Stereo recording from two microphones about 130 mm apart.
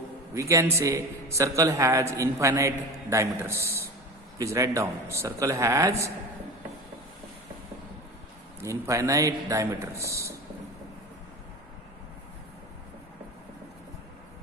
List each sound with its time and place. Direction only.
0.3 s a man's voice: 25° right (ahead or behind)
8.6 s a man's voice: 25° right (ahead or behind)